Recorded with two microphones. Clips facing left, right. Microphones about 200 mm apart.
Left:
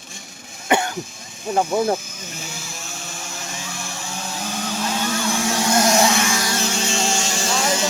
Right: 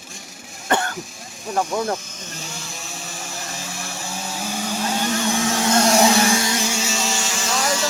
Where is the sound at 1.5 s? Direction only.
25° left (ahead or behind).